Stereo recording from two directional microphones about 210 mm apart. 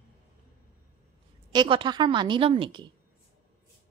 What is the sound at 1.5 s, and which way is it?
A woman's voice, 20° right (ahead or behind).